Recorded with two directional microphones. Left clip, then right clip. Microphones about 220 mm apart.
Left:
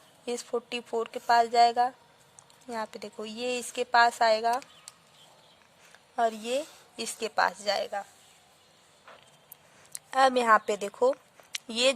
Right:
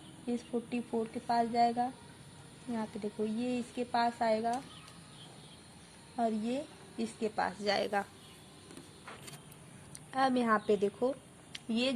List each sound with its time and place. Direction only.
0.3 s speech: 50° left (ahead or behind)
6.1 s speech: 50° left (ahead or behind); by 8.0 s 30° left (ahead or behind)
9.9 s speech: 45° left (ahead or behind)